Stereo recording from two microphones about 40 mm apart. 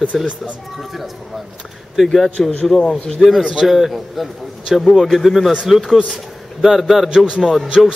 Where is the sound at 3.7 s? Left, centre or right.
Centre.